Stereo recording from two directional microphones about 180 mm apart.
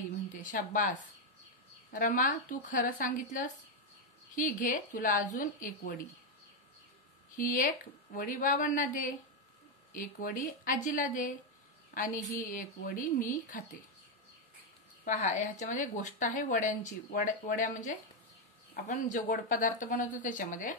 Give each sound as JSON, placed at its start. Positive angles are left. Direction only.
{"t": 0.3, "sound": "a woman's voice", "side_deg": 45}
{"t": 7.3, "sound": "a woman's voice", "side_deg": 50}
{"t": 15.0, "sound": "a woman's voice", "side_deg": 45}